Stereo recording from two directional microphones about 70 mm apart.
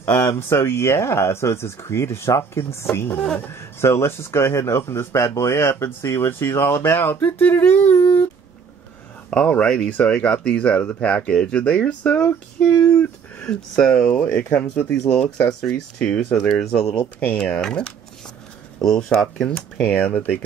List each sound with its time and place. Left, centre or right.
0.0 s speech: left
0.3 s speech: left
9.3 s speech: centre
14.2 s speech: left
14.6 s speech: centre
17.0 s speech: left
17.6 s speech: centre
19.9 s speech: centre